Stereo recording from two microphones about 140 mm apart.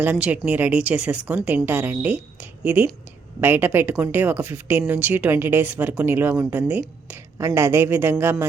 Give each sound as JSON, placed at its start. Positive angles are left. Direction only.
{"t": 0.0, "sound": "speech", "side_deg": -10}